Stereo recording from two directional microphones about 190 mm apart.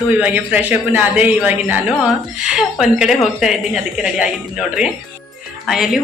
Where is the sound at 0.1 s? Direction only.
10° right (ahead or behind).